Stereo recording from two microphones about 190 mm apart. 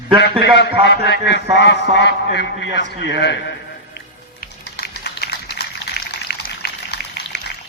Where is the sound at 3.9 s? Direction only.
55° left (ahead or behind).